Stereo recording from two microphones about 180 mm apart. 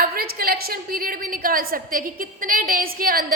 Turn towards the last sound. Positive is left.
turn(degrees=-55)  # may be behind; listen again after turning